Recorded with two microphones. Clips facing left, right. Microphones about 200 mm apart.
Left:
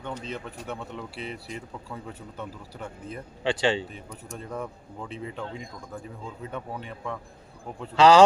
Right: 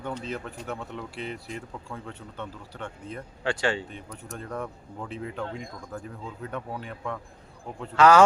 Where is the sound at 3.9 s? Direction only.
Centre (ahead or behind).